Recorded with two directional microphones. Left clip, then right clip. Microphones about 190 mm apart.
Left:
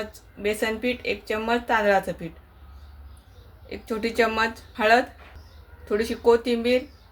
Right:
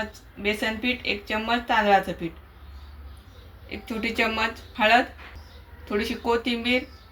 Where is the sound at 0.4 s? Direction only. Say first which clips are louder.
Left 1 dB; 60° left (ahead or behind).